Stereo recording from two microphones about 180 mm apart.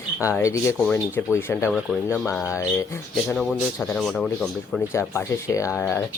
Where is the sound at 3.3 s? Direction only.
Centre (ahead or behind).